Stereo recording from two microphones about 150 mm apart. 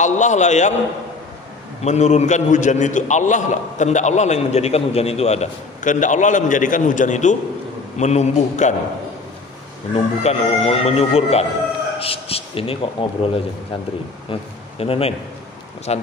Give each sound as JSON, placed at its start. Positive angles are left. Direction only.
{"t": 0.0, "sound": "a man's voice", "side_deg": 55}
{"t": 1.9, "sound": "a man's voice", "side_deg": 50}
{"t": 9.9, "sound": "a man's voice", "side_deg": 45}